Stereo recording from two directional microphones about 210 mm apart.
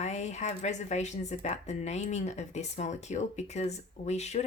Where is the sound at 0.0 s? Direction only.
30° left (ahead or behind).